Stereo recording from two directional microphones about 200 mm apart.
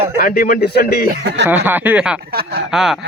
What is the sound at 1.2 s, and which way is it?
Speech, 55° right (ahead or behind).